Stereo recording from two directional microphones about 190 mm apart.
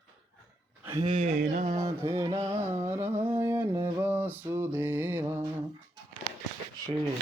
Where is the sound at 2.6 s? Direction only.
15° right (ahead or behind).